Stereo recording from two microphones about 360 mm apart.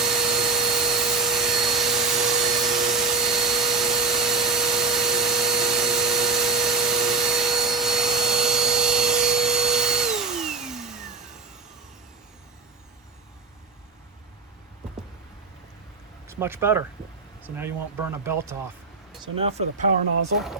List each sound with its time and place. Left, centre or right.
0.0 s a sound: centre
16.2 s speech: centre
19.4 s speech: centre